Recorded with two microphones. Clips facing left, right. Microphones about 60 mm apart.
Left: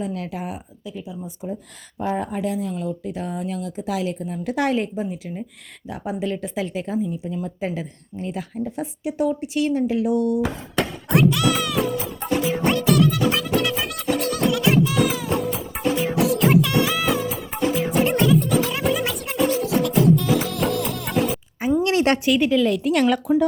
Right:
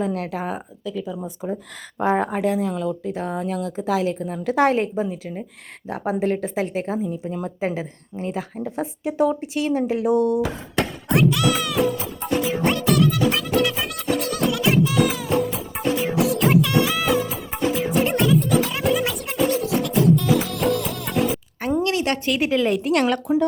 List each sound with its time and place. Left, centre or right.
0.0 s speech: right
1.4 s speech: right
2.0 s speech: right
3.1 s a woman's voice: right
10.8 s music: centre
21.8 s a woman's voice: left
22.8 s a woman's voice: centre